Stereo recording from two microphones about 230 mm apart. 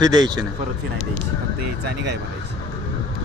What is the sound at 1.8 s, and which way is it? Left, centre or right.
Speech, right.